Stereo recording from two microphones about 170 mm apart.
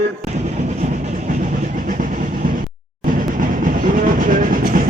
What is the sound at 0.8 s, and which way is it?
Vehicle, 45° right (ahead or behind).